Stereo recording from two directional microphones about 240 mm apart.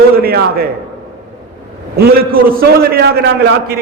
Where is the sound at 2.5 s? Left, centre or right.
Right.